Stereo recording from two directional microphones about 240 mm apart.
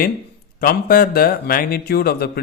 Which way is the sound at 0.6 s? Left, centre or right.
Left.